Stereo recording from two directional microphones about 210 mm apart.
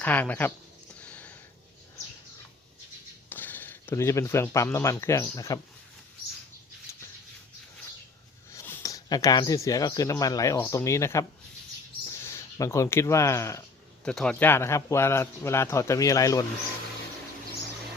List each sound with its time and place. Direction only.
0.0 s speech: 5° left (ahead or behind)
1.0 s sniff: 5° left (ahead or behind)
3.2 s speech: 10° left (ahead or behind)
6.9 s a sound: 15° left (ahead or behind)
8.5 s speech: 10° left (ahead or behind)